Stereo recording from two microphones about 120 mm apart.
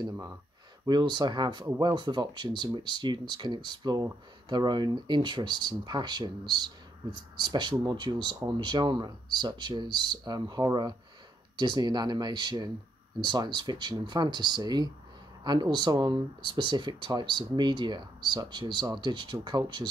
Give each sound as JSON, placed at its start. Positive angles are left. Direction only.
{"t": 0.0, "sound": "speech", "side_deg": -25}
{"t": 0.8, "sound": "speech", "side_deg": -35}